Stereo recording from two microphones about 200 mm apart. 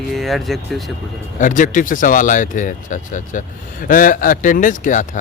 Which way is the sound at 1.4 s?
40° left (ahead or behind).